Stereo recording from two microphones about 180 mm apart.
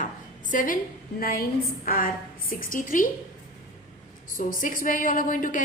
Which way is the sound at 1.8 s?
50° left (ahead or behind).